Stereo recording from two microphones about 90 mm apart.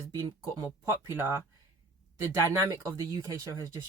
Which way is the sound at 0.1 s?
40° right (ahead or behind).